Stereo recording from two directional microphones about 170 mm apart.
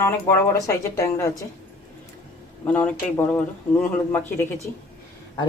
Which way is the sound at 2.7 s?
10° left (ahead or behind).